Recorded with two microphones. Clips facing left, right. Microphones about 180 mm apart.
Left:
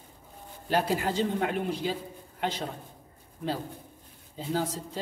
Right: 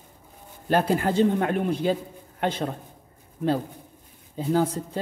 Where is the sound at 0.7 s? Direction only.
55° right (ahead or behind).